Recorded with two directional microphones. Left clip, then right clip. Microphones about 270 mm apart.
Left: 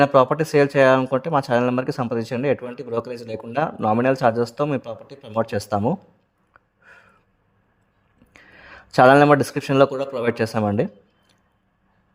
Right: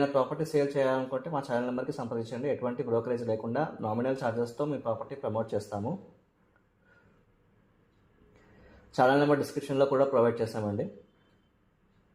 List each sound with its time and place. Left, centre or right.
0.0 s speech: left
9.0 s speech: left
9.9 s speech: centre
10.3 s speech: left